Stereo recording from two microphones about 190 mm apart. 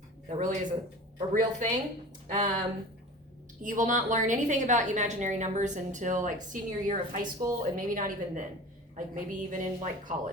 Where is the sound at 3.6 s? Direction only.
45° right (ahead or behind).